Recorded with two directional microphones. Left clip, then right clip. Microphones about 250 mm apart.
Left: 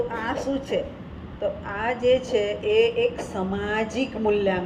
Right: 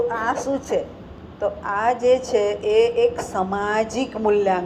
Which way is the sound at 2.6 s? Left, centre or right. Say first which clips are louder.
Right 1 dB; right.